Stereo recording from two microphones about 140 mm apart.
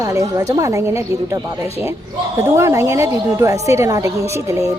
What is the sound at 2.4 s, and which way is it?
Speech, 20° right (ahead or behind).